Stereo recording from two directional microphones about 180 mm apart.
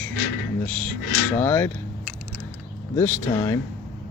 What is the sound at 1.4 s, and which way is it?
Speech, 10° left (ahead or behind).